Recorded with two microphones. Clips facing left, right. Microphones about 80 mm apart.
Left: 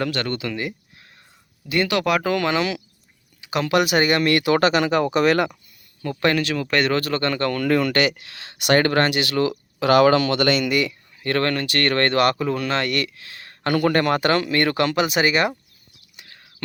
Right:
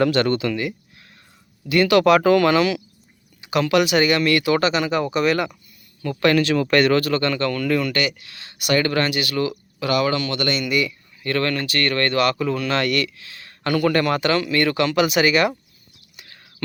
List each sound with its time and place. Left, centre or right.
0.0 s speech: centre
0.5 s a sound: left
1.7 s speech: centre
3.7 s speech: left
6.1 s speech: centre; by 8.9 s left
8.9 s speech: left
10.7 s speech: left
12.6 s speech: left
15.0 s speech: left
16.1 s a sound: centre